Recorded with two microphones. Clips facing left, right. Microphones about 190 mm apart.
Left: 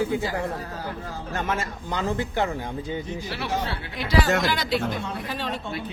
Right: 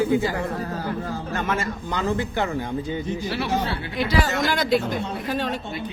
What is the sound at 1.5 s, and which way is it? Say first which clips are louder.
Speech: right 2 dB; 35° left (ahead or behind).